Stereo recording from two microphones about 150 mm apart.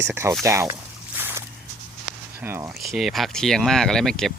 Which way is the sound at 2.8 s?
Centre (ahead or behind).